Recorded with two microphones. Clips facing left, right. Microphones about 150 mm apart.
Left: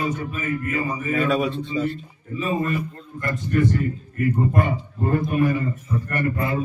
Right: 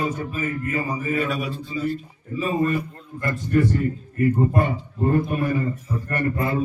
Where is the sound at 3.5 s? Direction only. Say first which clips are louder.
Right 1 dB; 30° right (ahead or behind).